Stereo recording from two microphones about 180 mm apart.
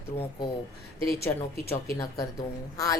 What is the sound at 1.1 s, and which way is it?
Speech, 15° left (ahead or behind).